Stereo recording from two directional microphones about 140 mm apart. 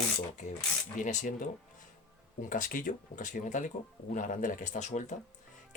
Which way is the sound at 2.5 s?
75° left (ahead or behind).